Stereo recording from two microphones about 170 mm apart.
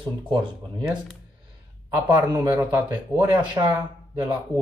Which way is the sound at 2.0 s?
20° right (ahead or behind).